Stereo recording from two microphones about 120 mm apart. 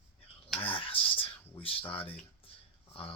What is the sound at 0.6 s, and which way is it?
Speech, 45° left (ahead or behind).